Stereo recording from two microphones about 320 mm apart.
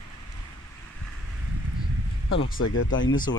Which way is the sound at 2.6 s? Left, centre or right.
Left.